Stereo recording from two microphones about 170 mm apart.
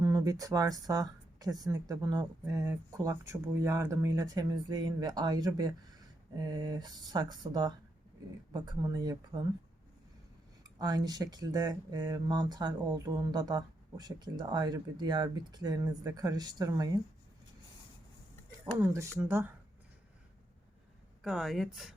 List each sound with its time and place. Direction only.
0.0 s speech: 20° right (ahead or behind)
10.6 s speech: 25° right (ahead or behind)
18.9 s speech: 15° right (ahead or behind)
21.2 s speech: centre (ahead or behind)